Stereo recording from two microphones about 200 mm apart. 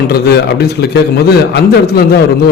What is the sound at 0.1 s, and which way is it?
Speech, 55° left (ahead or behind).